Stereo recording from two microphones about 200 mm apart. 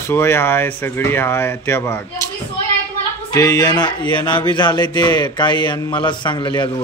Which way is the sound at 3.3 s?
20° left (ahead or behind).